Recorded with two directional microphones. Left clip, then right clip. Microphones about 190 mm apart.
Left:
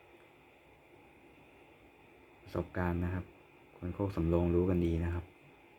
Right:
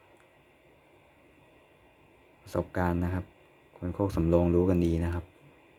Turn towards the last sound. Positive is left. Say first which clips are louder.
# right 5 dB
turn(degrees=-30)  # may be behind; listen again after turning